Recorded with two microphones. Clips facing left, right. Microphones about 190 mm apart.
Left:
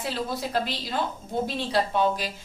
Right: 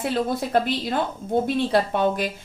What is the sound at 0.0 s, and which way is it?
A woman's voice, 55° right (ahead or behind).